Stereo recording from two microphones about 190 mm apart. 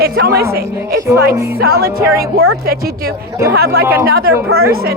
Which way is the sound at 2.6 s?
55° right (ahead or behind).